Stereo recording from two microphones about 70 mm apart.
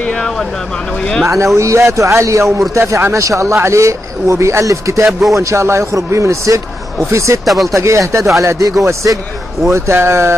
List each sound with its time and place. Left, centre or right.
0.0 s vehicle: centre
1.2 s speech: right
7.4 s speech: centre
7.7 s speech: right